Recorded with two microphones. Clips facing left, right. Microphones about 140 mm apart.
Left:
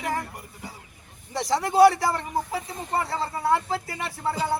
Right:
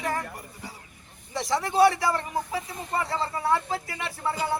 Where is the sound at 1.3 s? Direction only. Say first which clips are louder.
Left 2 dB; 35° left (ahead or behind).